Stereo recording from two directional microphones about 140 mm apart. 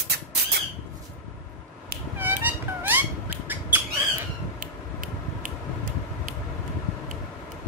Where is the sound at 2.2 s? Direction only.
15° right (ahead or behind).